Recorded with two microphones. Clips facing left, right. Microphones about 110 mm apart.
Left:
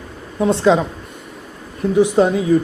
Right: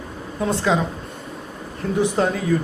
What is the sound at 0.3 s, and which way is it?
Speech, 20° left (ahead or behind).